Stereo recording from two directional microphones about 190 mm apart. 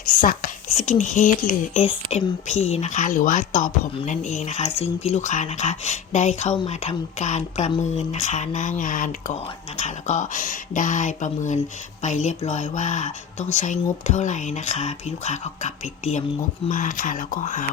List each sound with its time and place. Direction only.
0.1 s speech: 45° left (ahead or behind)